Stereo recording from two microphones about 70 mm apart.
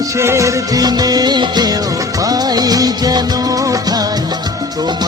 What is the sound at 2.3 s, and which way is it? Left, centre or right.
Music of bollywood, right.